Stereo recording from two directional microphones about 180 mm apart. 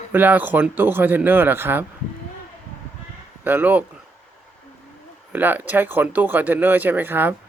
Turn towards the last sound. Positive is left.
turn(degrees=-10)  # may be behind; listen again after turning